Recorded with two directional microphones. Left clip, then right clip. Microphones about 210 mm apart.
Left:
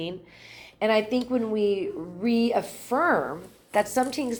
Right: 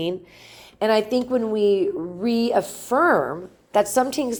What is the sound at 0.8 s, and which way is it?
A woman's voice, 35° right (ahead or behind).